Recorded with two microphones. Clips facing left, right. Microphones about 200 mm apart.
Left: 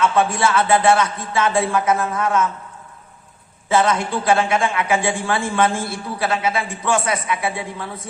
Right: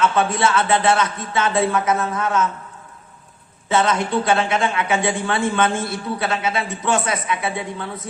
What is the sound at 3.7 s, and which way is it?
A man's voice, 30° right (ahead or behind).